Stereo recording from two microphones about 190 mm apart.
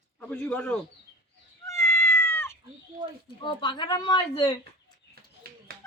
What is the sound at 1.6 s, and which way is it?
Cat, 15° left (ahead or behind).